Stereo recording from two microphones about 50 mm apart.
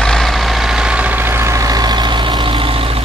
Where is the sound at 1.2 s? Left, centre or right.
Right.